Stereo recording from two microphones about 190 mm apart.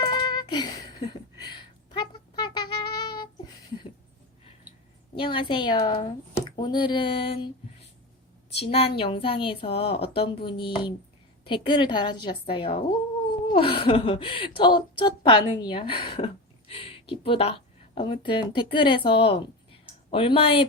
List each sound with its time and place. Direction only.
0.0 s a sound: 25° left (ahead or behind)
5.1 s a woman's voice: 25° left (ahead or behind)
8.4 s a woman's voice: 30° left (ahead or behind)